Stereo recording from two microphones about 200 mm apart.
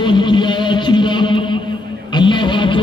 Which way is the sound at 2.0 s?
25° left (ahead or behind).